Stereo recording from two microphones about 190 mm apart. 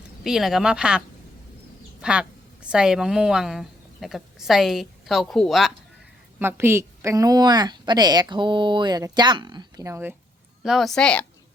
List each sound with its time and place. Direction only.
0.3 s a woman's voice: centre (ahead or behind)
6.4 s a woman's voice: 10° right (ahead or behind)
10.6 s speech: centre (ahead or behind)